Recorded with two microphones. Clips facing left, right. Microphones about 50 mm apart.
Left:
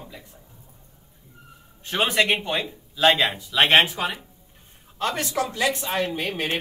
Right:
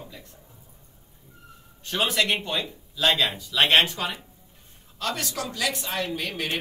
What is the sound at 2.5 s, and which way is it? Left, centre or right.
Speech, left.